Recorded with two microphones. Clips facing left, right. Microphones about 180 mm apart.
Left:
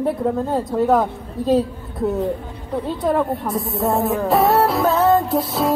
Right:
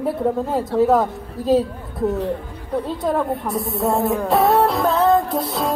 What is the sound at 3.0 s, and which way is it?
Music, centre (ahead or behind).